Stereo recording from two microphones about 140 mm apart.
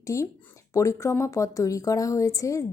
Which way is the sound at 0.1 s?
25° left (ahead or behind).